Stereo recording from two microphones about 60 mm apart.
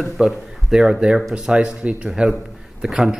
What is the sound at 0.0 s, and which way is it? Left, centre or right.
Speech, centre.